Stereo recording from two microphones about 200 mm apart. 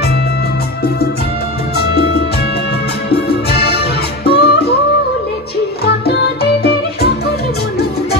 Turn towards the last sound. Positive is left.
turn(degrees=55)  # may be behind; listen again after turning